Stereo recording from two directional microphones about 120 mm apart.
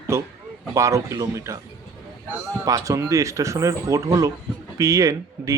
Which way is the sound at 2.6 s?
25° right (ahead or behind).